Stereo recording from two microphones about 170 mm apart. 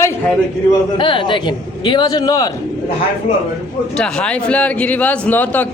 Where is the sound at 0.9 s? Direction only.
30° left (ahead or behind).